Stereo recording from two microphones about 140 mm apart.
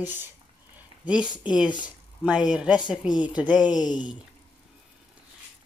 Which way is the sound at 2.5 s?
10° right (ahead or behind).